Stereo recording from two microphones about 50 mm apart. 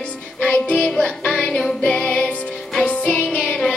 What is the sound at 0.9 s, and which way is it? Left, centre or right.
Music, centre.